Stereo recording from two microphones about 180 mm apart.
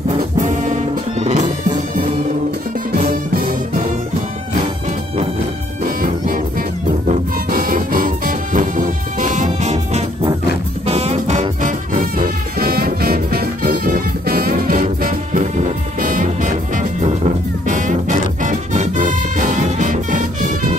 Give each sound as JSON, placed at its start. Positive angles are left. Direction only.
{"t": 1.2, "sound": "music", "side_deg": -40}
{"t": 2.9, "sound": "music", "side_deg": -50}
{"t": 5.9, "sound": "music", "side_deg": -50}
{"t": 7.5, "sound": "music", "side_deg": -50}